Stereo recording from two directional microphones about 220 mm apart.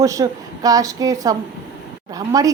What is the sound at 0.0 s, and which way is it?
A woman's voice, 15° right (ahead or behind).